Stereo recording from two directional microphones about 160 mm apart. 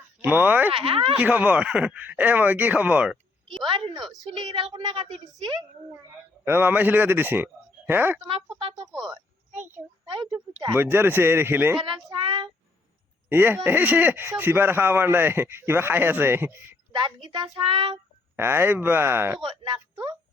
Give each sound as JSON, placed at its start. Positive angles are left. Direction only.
{"t": 0.2, "sound": "speech", "side_deg": -10}
{"t": 0.7, "sound": "speech", "side_deg": -35}
{"t": 1.2, "sound": "speech", "side_deg": -10}
{"t": 3.6, "sound": "a child's voice", "side_deg": -30}
{"t": 5.9, "sound": "speech", "side_deg": -15}
{"t": 8.5, "sound": "speech", "side_deg": -35}
{"t": 10.1, "sound": "a child's voice", "side_deg": -30}
{"t": 10.8, "sound": "speech", "side_deg": -15}
{"t": 12.0, "sound": "speech", "side_deg": -30}
{"t": 13.2, "sound": "speech", "side_deg": -15}
{"t": 16.9, "sound": "a child's voice", "side_deg": -30}
{"t": 18.3, "sound": "speech", "side_deg": -15}
{"t": 19.6, "sound": "a child's voice", "side_deg": -30}